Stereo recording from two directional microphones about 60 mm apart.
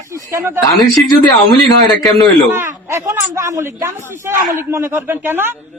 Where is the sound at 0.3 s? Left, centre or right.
Right.